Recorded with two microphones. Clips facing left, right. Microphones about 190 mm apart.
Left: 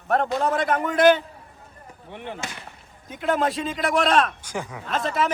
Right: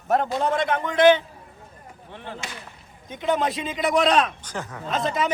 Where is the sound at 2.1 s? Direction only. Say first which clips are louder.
Left 3 dB; 15° left (ahead or behind).